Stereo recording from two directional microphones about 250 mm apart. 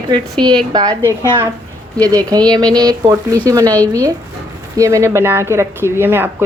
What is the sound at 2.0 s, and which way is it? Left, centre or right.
Speech, centre.